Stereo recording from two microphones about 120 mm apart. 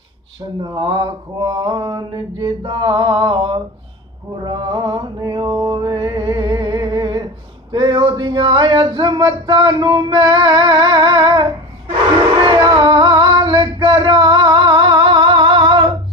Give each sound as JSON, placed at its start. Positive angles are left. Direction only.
{"t": 0.6, "sound": "mantra", "side_deg": -40}
{"t": 12.5, "sound": "singing", "side_deg": -35}
{"t": 14.0, "sound": "music", "side_deg": -40}